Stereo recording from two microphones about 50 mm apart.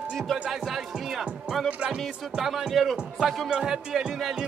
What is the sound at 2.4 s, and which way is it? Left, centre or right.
Music, centre.